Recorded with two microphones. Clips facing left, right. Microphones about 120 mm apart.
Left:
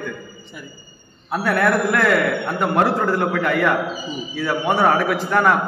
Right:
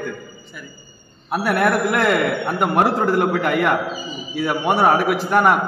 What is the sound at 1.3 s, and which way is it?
A man's voice, 15° right (ahead or behind).